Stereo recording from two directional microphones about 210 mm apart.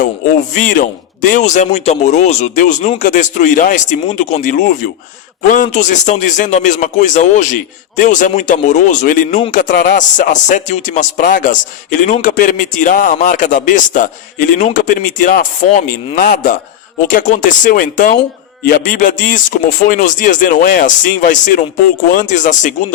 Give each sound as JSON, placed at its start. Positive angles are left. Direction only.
{"t": 0.5, "sound": "speech", "side_deg": 40}